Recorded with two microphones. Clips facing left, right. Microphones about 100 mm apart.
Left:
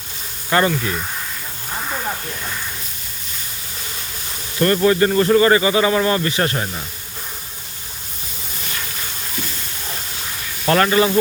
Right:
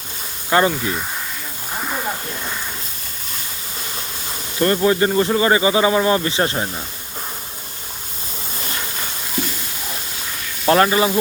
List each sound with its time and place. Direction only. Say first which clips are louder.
0.5 s speech: right 1 dB; 20° right (ahead or behind)
4.6 s speech: left 1 dB; 20° right (ahead or behind)
10.8 s speech: left 1 dB; 15° right (ahead or behind)